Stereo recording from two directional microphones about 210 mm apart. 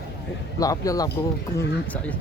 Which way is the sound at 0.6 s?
15° left (ahead or behind).